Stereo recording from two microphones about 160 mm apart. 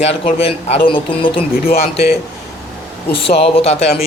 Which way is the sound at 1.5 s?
70° left (ahead or behind).